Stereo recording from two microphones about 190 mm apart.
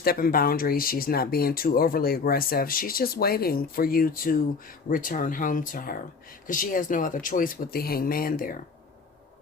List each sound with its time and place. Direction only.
0.0 s speech: 50° left (ahead or behind)